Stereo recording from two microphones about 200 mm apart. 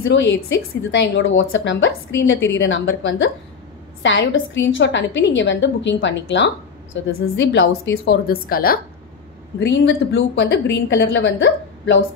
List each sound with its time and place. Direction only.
0.0 s a woman's voice: 65° left (ahead or behind); by 8.7 s 50° left (ahead or behind)
9.6 s a woman's voice: 60° left (ahead or behind)